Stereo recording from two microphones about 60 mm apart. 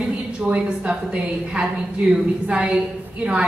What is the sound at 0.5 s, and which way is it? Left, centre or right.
A woman's voice, centre.